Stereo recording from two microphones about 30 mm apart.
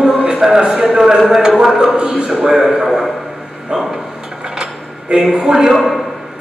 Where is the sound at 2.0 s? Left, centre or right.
Right.